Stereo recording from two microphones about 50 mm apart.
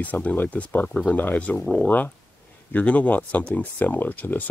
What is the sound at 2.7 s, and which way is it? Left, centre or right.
Speech, left.